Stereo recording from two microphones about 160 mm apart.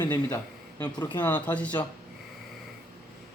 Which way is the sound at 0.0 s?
20° left (ahead or behind).